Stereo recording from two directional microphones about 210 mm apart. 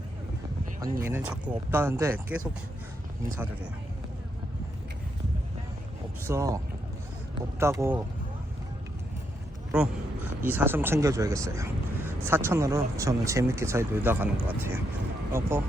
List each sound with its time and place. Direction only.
0.8 s speech: 15° right (ahead or behind)
6.2 s speech: 15° right (ahead or behind)
7.6 s speech: 10° right (ahead or behind)
10.4 s speech: 10° right (ahead or behind)